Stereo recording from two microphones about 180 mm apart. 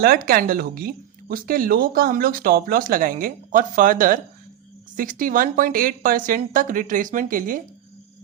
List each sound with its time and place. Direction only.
0.0 s speech: 55° right (ahead or behind)